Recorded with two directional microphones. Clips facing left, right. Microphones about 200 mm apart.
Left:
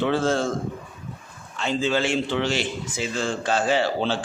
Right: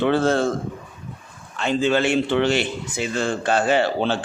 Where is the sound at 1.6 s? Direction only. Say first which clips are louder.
Right 4 dB; 60° right (ahead or behind).